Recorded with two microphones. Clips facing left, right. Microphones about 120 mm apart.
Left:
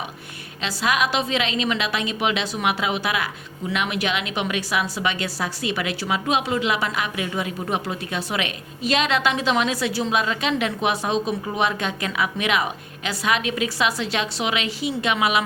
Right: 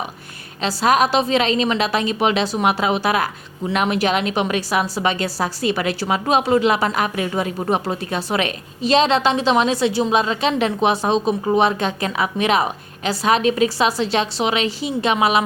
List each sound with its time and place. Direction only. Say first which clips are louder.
0.6 s a woman's voice: right 6 dB; 40° right (ahead or behind)